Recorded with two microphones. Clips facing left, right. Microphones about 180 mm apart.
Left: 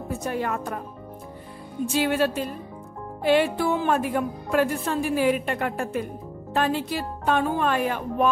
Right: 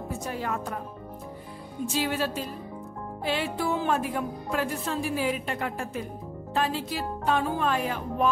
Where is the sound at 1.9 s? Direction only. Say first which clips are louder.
Left 6 dB; 60° left (ahead or behind).